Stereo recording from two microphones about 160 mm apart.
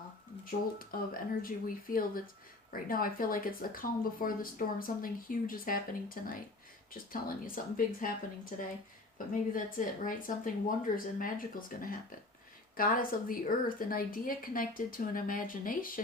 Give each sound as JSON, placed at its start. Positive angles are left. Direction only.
{"t": 0.8, "sound": "speech", "side_deg": 65}